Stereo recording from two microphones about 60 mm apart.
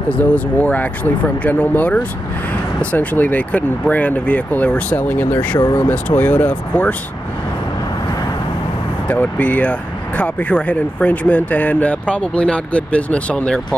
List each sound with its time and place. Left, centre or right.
0.2 s speech: left
9.0 s speech: left